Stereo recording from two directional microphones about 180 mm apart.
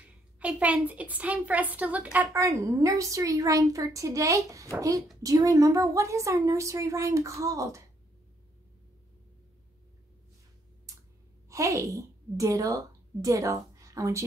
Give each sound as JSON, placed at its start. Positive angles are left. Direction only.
{"t": 0.4, "sound": "a woman's voice", "side_deg": -5}
{"t": 11.4, "sound": "a woman's voice", "side_deg": -15}